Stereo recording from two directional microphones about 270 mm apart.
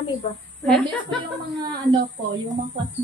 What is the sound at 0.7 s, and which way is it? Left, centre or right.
Speech, centre.